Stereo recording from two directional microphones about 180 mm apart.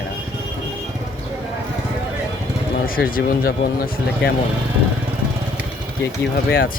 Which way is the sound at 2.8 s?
55° left (ahead or behind).